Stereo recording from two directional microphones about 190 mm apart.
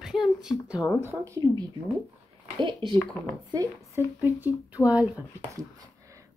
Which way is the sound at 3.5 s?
15° right (ahead or behind).